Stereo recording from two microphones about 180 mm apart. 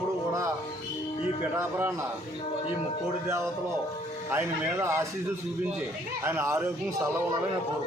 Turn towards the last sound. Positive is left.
turn(degrees=-15)  # may be behind; listen again after turning